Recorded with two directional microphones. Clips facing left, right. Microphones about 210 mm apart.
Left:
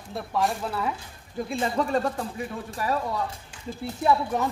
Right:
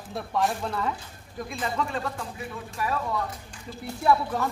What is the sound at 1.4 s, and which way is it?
Speech, 30° left (ahead or behind).